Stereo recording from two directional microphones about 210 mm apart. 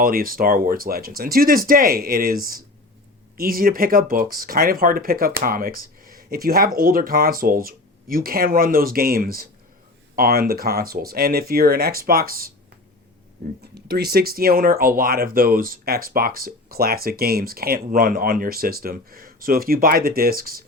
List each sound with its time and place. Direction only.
0.0 s speech: 45° right (ahead or behind)
13.7 s speech: 50° right (ahead or behind)